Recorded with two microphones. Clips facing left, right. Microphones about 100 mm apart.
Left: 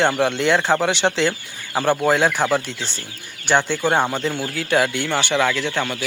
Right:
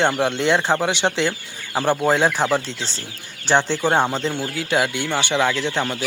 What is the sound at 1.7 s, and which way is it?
Speech, 5° left (ahead or behind).